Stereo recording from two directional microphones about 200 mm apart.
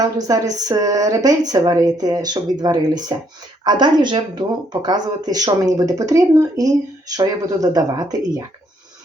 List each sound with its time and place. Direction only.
0.0 s speech: 20° right (ahead or behind)